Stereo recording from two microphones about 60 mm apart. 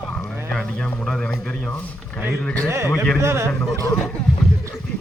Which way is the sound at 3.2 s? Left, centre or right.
Right.